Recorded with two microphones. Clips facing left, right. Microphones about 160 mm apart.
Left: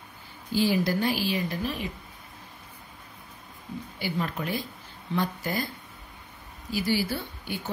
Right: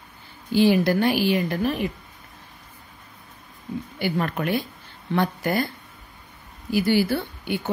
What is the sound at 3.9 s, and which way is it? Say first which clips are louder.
Speech: right 5 dB; 60° right (ahead or behind).